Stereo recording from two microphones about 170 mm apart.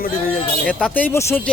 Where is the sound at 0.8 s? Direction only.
10° left (ahead or behind).